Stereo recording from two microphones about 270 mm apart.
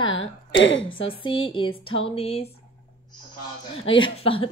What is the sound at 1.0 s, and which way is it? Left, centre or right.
A man's voice, centre.